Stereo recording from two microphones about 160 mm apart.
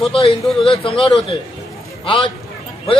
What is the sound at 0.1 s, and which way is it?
A man's voice, 35° left (ahead or behind).